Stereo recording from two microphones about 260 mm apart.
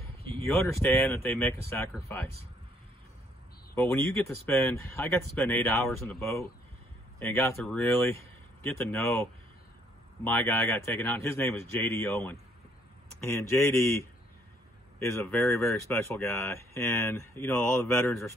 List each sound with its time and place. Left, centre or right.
0.3 s speech: centre
3.7 s speech: centre
10.2 s speech: centre